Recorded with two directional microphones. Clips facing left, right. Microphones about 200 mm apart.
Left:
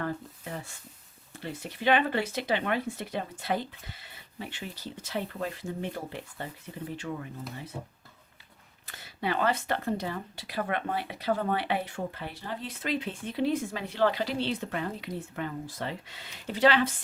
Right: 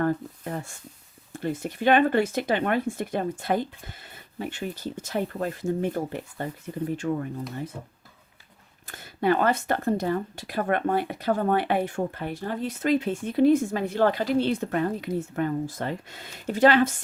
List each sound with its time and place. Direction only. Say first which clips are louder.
0.0 s speech: right 8 dB; 50° right (ahead or behind)
8.9 s speech: right 9 dB; 50° right (ahead or behind)